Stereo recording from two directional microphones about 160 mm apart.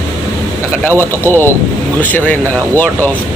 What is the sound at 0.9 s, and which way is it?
Speech, 15° right (ahead or behind).